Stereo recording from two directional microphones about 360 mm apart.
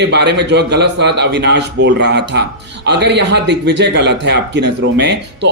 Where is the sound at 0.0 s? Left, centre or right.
Right.